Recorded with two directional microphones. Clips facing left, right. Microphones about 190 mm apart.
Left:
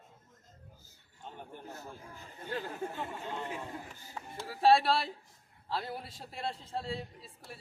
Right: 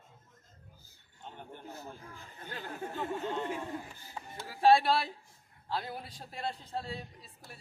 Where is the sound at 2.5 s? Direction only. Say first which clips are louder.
Left 3 dB; centre (ahead or behind).